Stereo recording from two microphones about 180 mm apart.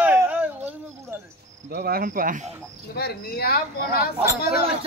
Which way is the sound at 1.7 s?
60° right (ahead or behind).